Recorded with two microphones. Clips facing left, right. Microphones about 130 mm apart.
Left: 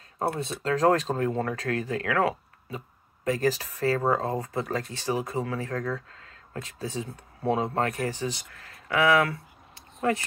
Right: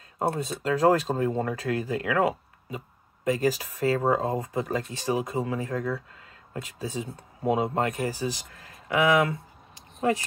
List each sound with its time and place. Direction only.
0.6 s speech: 10° right (ahead or behind)